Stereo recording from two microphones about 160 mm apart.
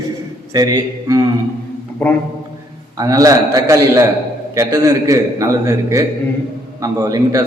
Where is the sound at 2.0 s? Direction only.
5° left (ahead or behind).